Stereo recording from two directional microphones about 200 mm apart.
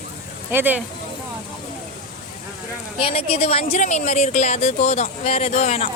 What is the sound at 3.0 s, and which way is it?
Speech, 30° left (ahead or behind).